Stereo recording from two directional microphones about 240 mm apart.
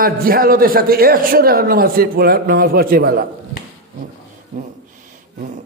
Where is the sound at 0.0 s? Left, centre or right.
Right.